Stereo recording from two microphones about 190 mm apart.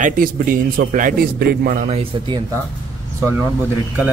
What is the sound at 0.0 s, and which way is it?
A man's voice, 45° right (ahead or behind).